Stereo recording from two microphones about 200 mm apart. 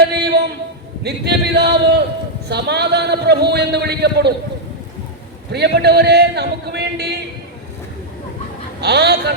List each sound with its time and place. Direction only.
0.1 s a sound: 55° right (ahead or behind)
1.0 s a man's voice: 55° right (ahead or behind)
5.5 s a man's voice: 55° right (ahead or behind)
8.8 s a man's voice: 55° right (ahead or behind)